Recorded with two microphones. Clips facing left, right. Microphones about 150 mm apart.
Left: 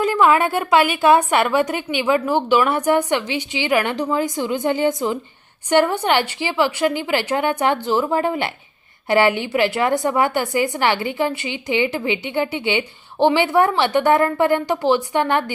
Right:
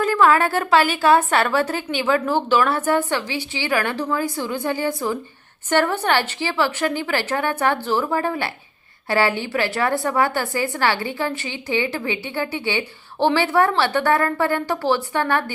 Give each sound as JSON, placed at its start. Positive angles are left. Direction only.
{"t": 0.0, "sound": "a woman's voice", "side_deg": 15}